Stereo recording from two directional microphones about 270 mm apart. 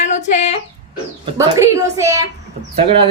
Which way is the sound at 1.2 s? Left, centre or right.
Centre.